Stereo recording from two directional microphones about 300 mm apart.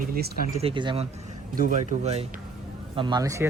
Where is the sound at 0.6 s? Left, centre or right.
Centre.